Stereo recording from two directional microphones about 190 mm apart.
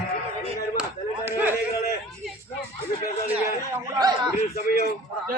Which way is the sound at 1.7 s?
55° left (ahead or behind).